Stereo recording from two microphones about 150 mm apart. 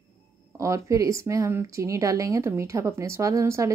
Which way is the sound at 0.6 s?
20° right (ahead or behind).